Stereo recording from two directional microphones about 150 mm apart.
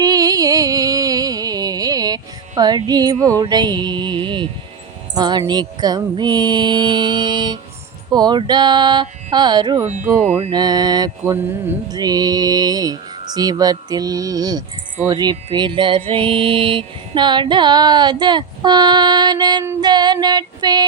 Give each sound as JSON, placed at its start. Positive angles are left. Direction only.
{"t": 0.0, "sound": "music", "side_deg": -25}
{"t": 5.1, "sound": "speech", "side_deg": -25}
{"t": 15.0, "sound": "music", "side_deg": -30}
{"t": 19.6, "sound": "speech", "side_deg": -30}